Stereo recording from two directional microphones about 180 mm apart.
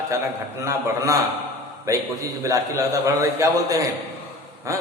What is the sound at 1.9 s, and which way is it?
Speech, 15° right (ahead or behind).